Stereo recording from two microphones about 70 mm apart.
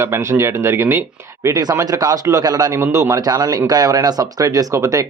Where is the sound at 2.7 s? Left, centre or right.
Right.